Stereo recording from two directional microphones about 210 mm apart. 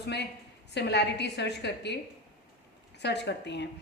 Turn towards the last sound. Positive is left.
turn(degrees=55)  # may be behind; listen again after turning